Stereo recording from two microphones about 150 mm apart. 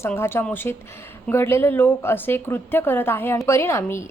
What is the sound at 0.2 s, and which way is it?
A woman's voice, 15° left (ahead or behind).